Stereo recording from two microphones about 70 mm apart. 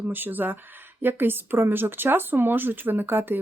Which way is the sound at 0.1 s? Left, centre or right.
Right.